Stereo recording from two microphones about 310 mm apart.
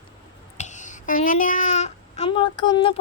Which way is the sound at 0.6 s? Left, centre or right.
Left.